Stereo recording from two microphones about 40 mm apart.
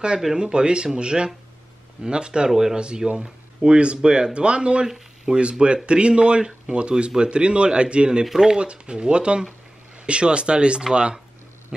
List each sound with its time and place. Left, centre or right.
0.2 s speech: centre
4.8 s speech: centre
5.4 s speech: right